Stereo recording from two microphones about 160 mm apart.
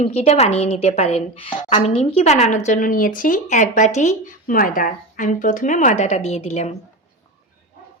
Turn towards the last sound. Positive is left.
turn(degrees=40)  # may be behind; listen again after turning